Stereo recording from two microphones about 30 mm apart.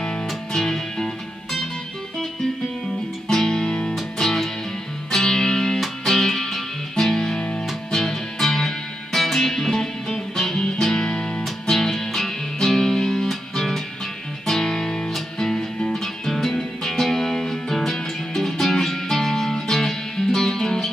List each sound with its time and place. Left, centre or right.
0.0 s music: centre
3.3 s music: centre
3.6 s music: left
4.2 s music: centre
7.3 s music: left
7.9 s music: centre
11.7 s music: centre